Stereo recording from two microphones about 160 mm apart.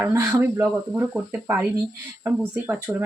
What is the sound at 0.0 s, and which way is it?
Speech, 15° right (ahead or behind).